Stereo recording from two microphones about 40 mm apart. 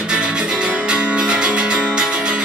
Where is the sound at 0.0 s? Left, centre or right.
Right.